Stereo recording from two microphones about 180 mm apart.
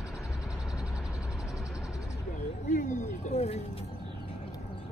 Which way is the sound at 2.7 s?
40° left (ahead or behind).